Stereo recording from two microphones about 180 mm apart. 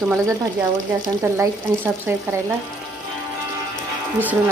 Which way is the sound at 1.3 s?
15° right (ahead or behind).